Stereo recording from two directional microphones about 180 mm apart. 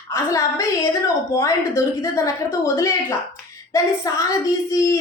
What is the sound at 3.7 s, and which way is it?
A woman's voice, 20° left (ahead or behind).